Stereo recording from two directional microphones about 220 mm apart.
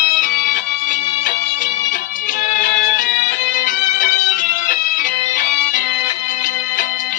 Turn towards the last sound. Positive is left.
turn(degrees=35)  # may be behind; listen again after turning